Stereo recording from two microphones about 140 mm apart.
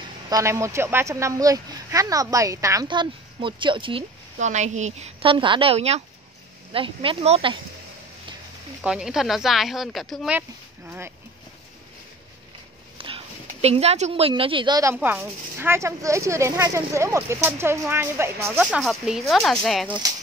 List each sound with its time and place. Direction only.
0.3 s speech: 20° right (ahead or behind)
2.9 s speech: 35° right (ahead or behind)
4.4 s a woman's voice: 55° right (ahead or behind)
5.2 s speech: 35° right (ahead or behind)
8.8 s speech: 5° right (ahead or behind)
10.9 s speech: 15° right (ahead or behind)
12.9 s a sound: 40° right (ahead or behind)
13.5 s speech: 50° right (ahead or behind)
15.0 s speech: 15° right (ahead or behind)
18.6 s speech: 5° right (ahead or behind)